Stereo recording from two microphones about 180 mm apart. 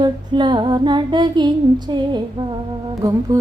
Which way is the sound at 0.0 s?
25° right (ahead or behind).